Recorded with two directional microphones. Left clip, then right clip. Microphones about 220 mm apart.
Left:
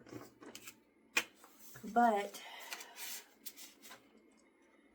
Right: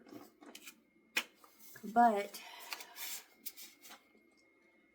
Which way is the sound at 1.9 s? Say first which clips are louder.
Right 2 dB; 25° right (ahead or behind).